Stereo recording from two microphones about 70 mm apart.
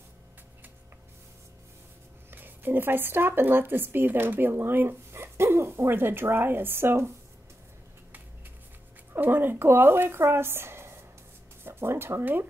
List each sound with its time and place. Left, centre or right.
2.3 s speech: right
9.1 s speech: right